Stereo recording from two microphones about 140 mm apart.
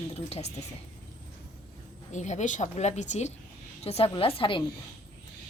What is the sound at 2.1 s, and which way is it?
Speech, 60° left (ahead or behind).